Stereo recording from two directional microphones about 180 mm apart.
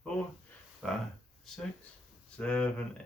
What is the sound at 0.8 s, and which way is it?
Speech, 5° left (ahead or behind).